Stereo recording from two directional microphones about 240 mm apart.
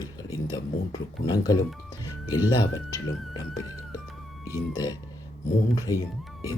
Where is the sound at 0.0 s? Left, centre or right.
Centre.